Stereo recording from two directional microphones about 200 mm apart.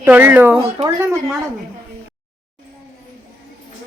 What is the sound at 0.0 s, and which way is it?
Speech, 10° right (ahead or behind).